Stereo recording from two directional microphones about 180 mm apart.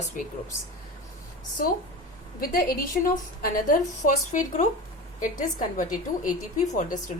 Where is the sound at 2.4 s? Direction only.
55° left (ahead or behind).